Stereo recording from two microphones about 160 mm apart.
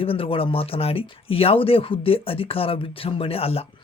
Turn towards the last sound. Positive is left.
turn(degrees=40)  # may be behind; listen again after turning